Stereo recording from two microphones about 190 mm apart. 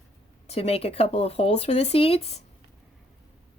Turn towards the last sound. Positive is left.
turn(degrees=30)  # may be behind; listen again after turning